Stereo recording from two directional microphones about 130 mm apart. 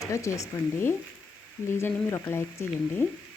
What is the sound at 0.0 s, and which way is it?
Speech, 25° left (ahead or behind).